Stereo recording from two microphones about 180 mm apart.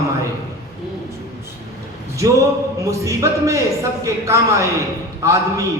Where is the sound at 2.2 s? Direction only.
20° right (ahead or behind).